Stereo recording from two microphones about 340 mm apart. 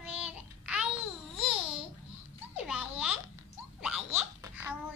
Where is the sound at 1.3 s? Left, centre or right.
Centre.